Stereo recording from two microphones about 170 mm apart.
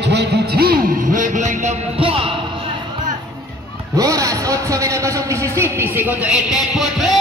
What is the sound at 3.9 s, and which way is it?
A man's voice, 20° right (ahead or behind).